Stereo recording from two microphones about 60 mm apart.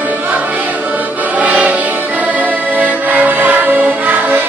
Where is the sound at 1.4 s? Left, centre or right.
Right.